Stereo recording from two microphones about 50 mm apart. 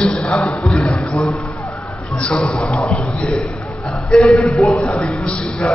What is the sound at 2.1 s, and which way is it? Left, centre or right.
A man's voice, left.